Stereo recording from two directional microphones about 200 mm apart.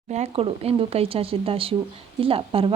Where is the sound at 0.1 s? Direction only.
30° right (ahead or behind).